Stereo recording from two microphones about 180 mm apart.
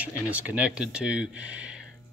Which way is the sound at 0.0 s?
10° right (ahead or behind).